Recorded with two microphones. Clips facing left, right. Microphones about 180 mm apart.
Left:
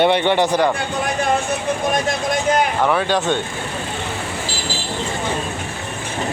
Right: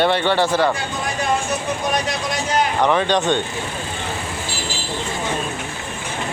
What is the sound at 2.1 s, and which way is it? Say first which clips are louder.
Vehicle: left 5 dB; 55° left (ahead or behind).